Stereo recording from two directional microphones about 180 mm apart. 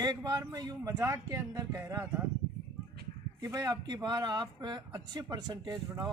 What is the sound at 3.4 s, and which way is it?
Speech, 20° right (ahead or behind).